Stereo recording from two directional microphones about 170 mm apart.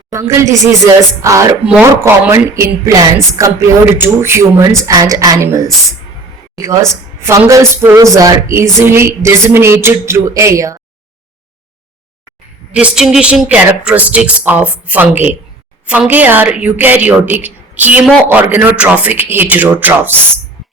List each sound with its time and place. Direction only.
0.1 s a woman's voice: 15° right (ahead or behind)
12.7 s speech: 5° right (ahead or behind)